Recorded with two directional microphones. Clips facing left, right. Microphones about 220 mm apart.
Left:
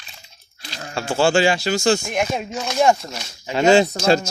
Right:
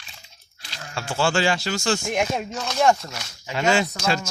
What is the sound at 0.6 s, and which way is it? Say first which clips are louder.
Sheep: left 5 dB; 35° left (ahead or behind).